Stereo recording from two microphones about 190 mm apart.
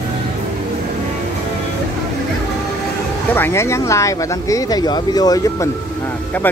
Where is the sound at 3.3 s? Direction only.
10° left (ahead or behind).